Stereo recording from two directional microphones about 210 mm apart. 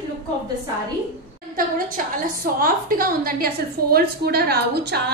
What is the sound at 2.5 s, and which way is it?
A woman's voice, 45° right (ahead or behind).